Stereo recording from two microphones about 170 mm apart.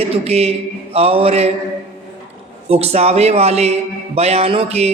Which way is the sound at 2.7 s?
35° right (ahead or behind).